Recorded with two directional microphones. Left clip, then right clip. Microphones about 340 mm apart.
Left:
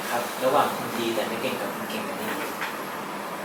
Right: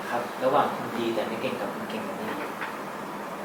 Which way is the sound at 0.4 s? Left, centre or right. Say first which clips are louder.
Left 1 dB; centre.